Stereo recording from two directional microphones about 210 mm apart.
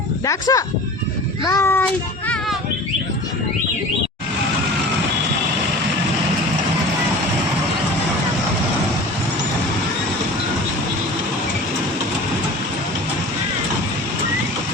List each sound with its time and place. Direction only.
0.3 s a child's voice: 15° left (ahead or behind)